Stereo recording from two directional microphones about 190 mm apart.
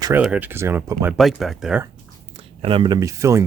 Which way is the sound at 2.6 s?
25° right (ahead or behind).